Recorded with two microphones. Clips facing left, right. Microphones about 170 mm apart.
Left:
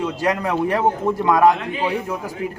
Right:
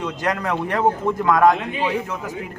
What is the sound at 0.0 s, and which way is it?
Speech, 10° left (ahead or behind).